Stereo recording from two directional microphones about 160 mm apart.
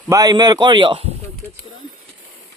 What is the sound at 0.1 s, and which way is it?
A man's voice, 25° right (ahead or behind).